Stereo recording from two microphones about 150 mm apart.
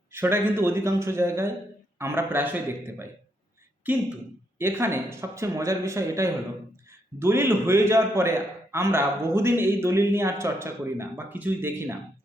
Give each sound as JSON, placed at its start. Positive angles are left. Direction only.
{"t": 0.1, "sound": "a man's voice", "side_deg": -15}